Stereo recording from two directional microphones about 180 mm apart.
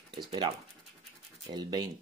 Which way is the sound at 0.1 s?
25° right (ahead or behind).